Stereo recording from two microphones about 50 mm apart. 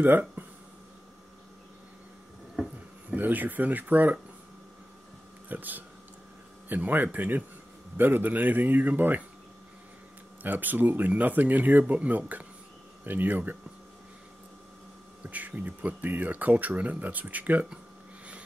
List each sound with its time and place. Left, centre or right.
0.0 s speech: right
3.2 s speech: right
5.5 s speech: right
10.4 s speech: right
15.2 s speech: right